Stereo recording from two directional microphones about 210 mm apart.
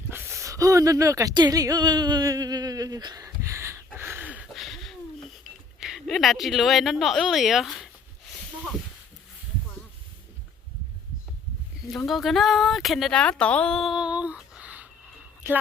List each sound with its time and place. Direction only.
0.1 s speech: 10° right (ahead or behind)
3.9 s a sound: 10° right (ahead or behind)
5.4 s speech: centre (ahead or behind)
11.9 s speech: centre (ahead or behind)